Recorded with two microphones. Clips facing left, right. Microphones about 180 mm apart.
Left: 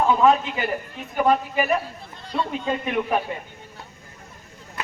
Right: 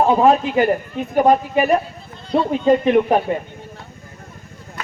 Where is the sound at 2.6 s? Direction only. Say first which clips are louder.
Right 13 dB; 35° right (ahead or behind).